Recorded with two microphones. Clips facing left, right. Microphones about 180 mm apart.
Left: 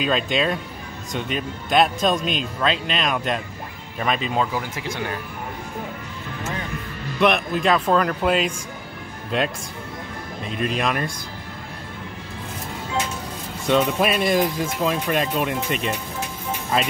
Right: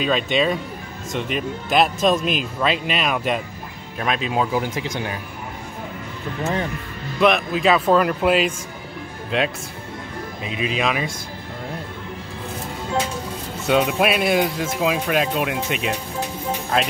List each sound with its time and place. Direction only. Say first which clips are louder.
0.0 s speech: right 2 dB; centre (ahead or behind)
4.6 s speech: right 4 dB; 20° right (ahead or behind)
7.2 s speech: right 2 dB; centre (ahead or behind)
10.4 s speech: even; 5° right (ahead or behind)
13.7 s speech: right 1 dB; 5° right (ahead or behind)